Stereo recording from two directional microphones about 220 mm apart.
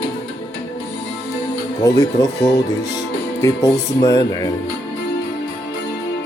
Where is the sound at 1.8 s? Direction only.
15° left (ahead or behind).